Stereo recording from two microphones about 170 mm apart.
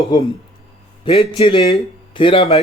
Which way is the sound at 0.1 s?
25° left (ahead or behind).